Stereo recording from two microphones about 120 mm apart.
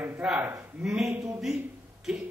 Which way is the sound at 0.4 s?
20° right (ahead or behind).